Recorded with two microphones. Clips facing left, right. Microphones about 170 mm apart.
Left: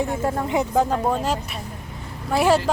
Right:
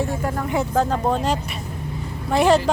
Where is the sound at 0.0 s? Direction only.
20° left (ahead or behind).